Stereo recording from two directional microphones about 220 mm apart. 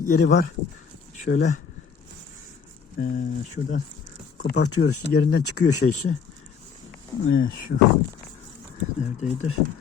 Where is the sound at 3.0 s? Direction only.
40° left (ahead or behind).